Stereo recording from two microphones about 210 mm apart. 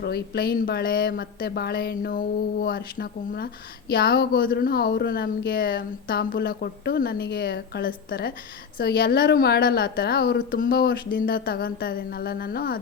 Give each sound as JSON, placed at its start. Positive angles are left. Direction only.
{"t": 0.0, "sound": "speech", "side_deg": 50}